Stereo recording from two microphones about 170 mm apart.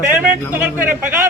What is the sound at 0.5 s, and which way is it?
Speech, 10° right (ahead or behind).